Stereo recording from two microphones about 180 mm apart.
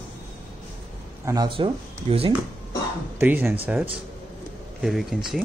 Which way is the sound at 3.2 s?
10° right (ahead or behind).